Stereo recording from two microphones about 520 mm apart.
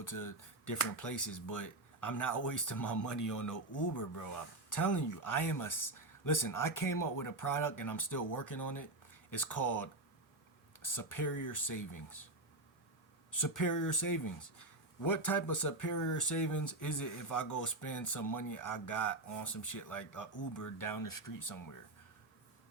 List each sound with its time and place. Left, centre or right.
0.0 s speech: left
13.3 s speech: left